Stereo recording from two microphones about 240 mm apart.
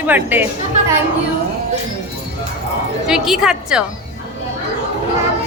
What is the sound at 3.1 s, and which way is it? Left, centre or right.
Speech, centre.